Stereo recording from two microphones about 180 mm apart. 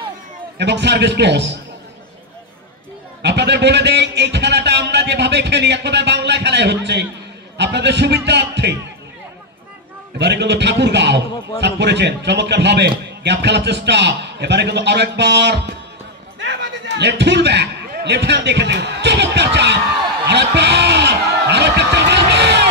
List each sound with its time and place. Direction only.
0.6 s a man's voice: 70° right (ahead or behind)
3.2 s a man's voice: 70° right (ahead or behind)
10.1 s a man's voice: 70° right (ahead or behind)